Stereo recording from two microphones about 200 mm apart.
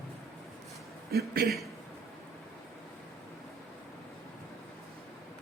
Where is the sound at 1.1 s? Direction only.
50° right (ahead or behind).